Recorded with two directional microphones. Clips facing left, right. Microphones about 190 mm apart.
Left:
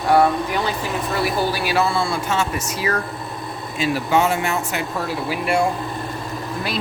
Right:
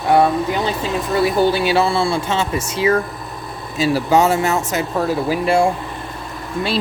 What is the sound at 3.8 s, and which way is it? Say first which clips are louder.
Speech: right 4 dB; 40° right (ahead or behind).